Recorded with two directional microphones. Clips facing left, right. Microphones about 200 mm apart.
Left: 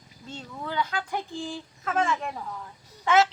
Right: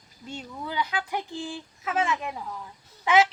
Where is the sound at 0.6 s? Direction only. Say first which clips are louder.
Left 1 dB; 10° right (ahead or behind).